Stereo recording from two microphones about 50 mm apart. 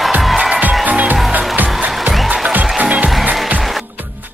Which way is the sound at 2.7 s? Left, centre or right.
Right.